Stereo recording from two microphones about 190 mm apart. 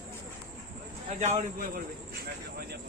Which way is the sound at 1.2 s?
35° right (ahead or behind).